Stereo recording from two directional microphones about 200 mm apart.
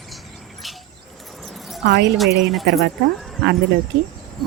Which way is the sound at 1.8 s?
55° right (ahead or behind).